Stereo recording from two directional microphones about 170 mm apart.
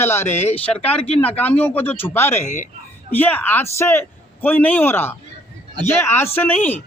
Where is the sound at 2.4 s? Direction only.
50° left (ahead or behind).